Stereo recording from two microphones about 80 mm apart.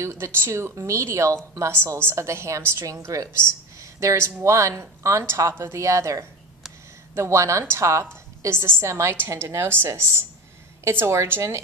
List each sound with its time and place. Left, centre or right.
0.0 s speech: right